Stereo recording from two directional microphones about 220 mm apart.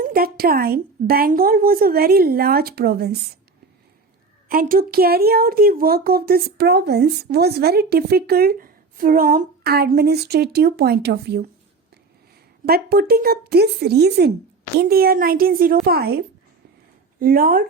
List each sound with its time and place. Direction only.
0.0 s speech: 40° right (ahead or behind)
4.4 s speech: 40° right (ahead or behind)
12.6 s speech: 45° right (ahead or behind)